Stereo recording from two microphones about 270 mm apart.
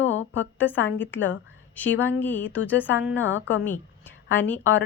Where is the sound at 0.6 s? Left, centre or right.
Centre.